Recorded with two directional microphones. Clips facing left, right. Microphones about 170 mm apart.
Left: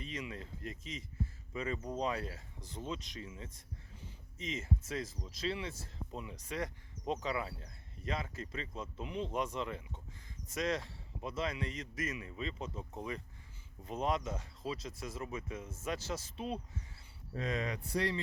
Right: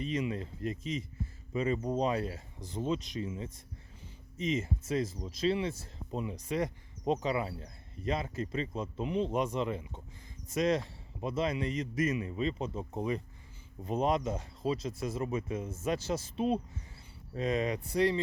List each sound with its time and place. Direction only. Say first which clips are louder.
0.0 s speech: right 10 dB; 25° right (ahead or behind)